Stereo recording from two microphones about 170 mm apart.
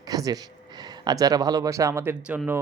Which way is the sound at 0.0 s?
20° right (ahead or behind).